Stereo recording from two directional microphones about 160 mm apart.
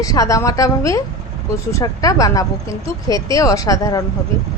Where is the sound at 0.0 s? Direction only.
20° left (ahead or behind).